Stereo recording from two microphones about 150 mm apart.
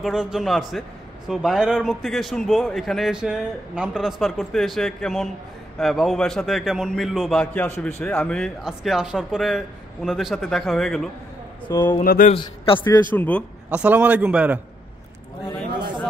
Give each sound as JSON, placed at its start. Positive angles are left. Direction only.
{"t": 0.0, "sound": "a man's voice", "side_deg": -5}
{"t": 11.7, "sound": "speech", "side_deg": 15}
{"t": 12.0, "sound": "speech", "side_deg": 70}
{"t": 12.3, "sound": "a man's voice", "side_deg": 35}
{"t": 13.1, "sound": "speech", "side_deg": 10}
{"t": 13.7, "sound": "a man's voice", "side_deg": -10}